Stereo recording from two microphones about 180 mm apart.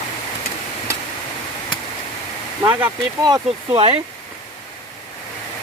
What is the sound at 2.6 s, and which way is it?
Speech, 10° right (ahead or behind).